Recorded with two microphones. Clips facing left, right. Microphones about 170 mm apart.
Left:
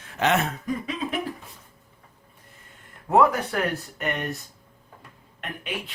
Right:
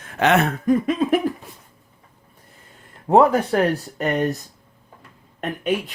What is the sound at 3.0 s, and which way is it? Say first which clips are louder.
Speech: right 5 dB; 30° right (ahead or behind).